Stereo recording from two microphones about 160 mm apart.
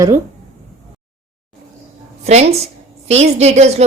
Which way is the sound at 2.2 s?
40° right (ahead or behind).